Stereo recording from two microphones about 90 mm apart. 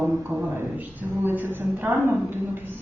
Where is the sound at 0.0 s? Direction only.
25° right (ahead or behind).